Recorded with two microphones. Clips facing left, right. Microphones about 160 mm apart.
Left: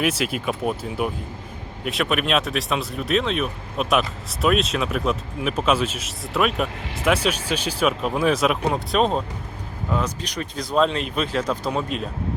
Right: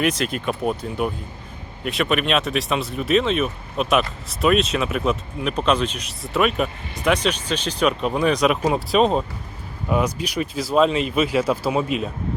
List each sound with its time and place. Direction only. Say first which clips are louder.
0.0 s speech: right 1 dB; 5° left (ahead or behind)